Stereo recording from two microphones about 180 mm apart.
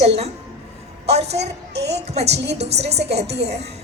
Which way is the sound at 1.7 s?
70° right (ahead or behind).